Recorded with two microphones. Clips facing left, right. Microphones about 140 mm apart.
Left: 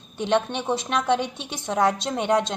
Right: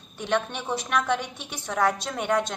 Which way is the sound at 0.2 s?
25° left (ahead or behind).